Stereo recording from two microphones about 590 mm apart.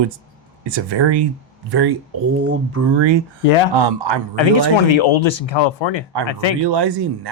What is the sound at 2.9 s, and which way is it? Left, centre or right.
Speech, right.